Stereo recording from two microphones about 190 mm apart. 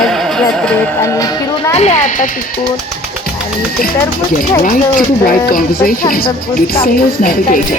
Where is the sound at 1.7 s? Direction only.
35° left (ahead or behind).